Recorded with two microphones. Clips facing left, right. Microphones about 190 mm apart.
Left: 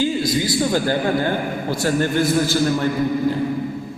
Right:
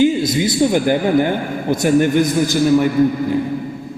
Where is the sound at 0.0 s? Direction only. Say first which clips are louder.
Right 5 dB; 20° right (ahead or behind).